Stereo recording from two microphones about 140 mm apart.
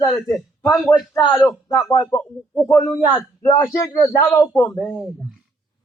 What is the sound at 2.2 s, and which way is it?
Speech, 10° left (ahead or behind).